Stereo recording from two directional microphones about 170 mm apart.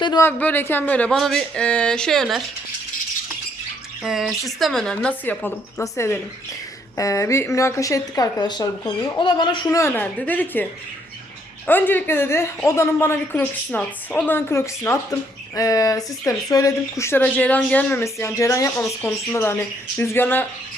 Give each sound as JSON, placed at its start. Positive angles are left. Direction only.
{"t": 0.2, "sound": "speech", "side_deg": 10}
{"t": 4.0, "sound": "speech", "side_deg": -5}
{"t": 9.6, "sound": "speech", "side_deg": 15}